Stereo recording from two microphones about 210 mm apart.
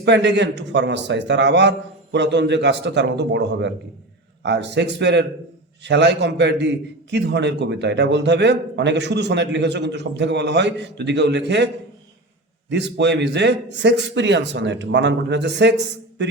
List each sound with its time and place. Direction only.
0.0 s a man's voice: 55° right (ahead or behind)
12.7 s a man's voice: 55° right (ahead or behind)